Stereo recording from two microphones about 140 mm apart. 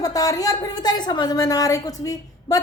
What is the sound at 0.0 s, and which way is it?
Speech, 25° left (ahead or behind).